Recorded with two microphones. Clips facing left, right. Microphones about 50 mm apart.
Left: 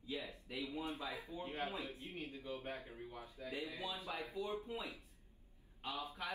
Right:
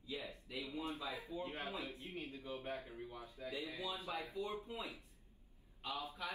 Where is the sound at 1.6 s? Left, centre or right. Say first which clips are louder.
Left 1 dB; left.